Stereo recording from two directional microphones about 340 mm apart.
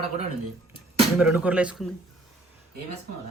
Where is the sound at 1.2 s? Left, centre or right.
Centre.